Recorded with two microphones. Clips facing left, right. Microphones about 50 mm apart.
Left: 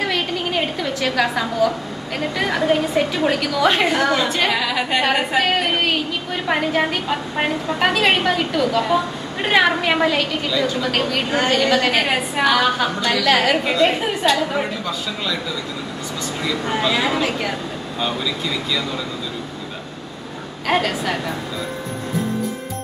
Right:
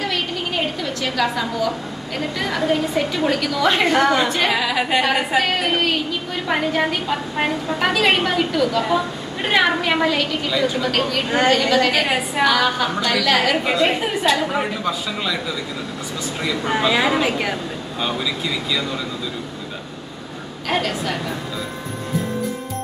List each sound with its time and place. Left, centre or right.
2.3 s a woman's voice: centre
16.4 s a woman's voice: centre
20.6 s a woman's voice: centre